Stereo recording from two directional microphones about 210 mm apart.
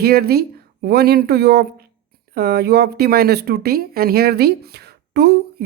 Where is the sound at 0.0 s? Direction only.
45° right (ahead or behind).